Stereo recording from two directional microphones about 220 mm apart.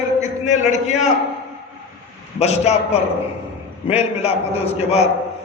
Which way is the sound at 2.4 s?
30° left (ahead or behind).